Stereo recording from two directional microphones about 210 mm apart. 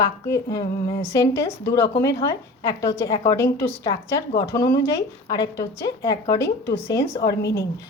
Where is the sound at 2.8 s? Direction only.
15° left (ahead or behind).